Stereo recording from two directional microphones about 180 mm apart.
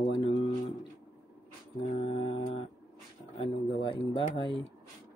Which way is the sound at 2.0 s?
35° left (ahead or behind).